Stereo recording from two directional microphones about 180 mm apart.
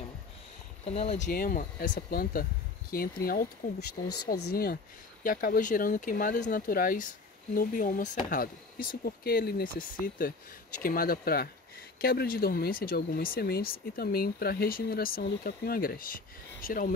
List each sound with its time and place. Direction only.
0.8 s speech: 35° left (ahead or behind)
1.3 s speech: 50° left (ahead or behind)